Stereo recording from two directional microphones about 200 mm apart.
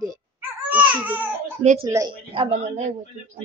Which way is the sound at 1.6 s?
35° right (ahead or behind).